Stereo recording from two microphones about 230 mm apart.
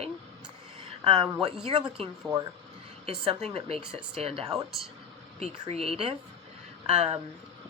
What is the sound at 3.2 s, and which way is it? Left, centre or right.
A woman's voice, right.